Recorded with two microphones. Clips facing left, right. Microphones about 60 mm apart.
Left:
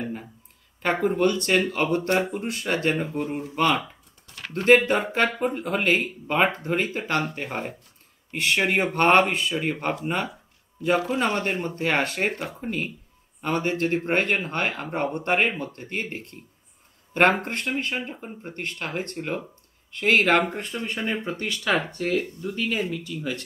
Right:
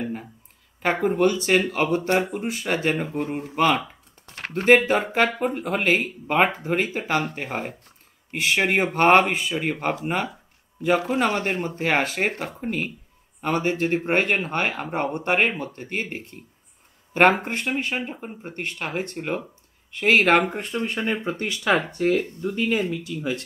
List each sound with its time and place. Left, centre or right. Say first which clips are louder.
0.0 s a sound: right 2 dB; centre
0.9 s speech: right 1 dB; centre
3.2 s speech: right 1 dB; right
3.5 s speech: right 2 dB; centre
21.0 s speech: right 2 dB; right
23.0 s speech: right 3 dB; centre